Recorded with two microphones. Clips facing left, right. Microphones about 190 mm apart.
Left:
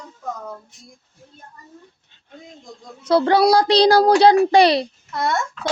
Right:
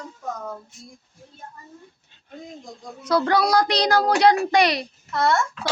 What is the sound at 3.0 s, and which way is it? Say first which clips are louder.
A child's voice: left 5 dB; 30° left (ahead or behind).